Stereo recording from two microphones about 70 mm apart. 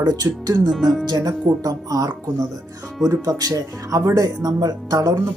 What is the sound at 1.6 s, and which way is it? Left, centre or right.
Speech, right.